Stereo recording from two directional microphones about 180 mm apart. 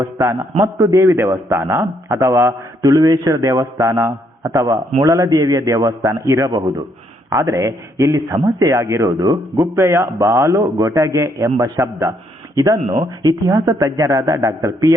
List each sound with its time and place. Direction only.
0.0 s speech: 15° right (ahead or behind)